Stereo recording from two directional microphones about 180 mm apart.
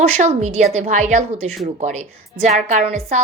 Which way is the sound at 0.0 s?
35° right (ahead or behind).